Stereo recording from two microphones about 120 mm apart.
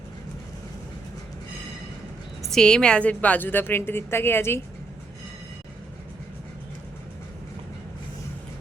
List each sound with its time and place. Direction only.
2.4 s a woman's voice: 5° left (ahead or behind); by 4.6 s 20° left (ahead or behind)